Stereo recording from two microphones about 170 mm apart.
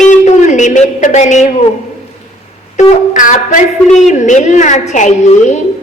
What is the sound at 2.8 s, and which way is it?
Speech, 45° left (ahead or behind).